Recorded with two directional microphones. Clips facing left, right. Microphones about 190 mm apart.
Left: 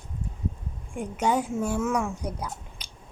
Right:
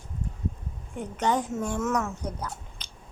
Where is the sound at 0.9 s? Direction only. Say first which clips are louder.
Left 1 dB; 10° left (ahead or behind).